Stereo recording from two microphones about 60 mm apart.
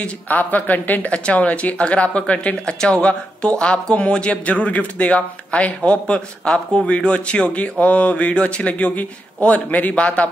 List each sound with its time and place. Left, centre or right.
0.0 s speech: left